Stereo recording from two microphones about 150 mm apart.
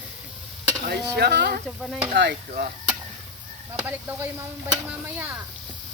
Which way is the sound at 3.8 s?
15° right (ahead or behind).